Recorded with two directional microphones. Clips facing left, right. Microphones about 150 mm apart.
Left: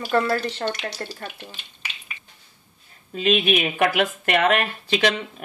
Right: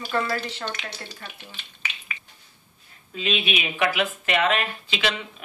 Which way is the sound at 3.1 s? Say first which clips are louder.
Left 7 dB; 50° left (ahead or behind).